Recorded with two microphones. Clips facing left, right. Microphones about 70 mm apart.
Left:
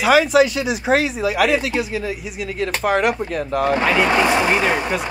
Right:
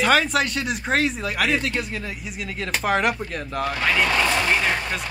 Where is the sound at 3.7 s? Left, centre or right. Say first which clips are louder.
Left 4 dB; centre.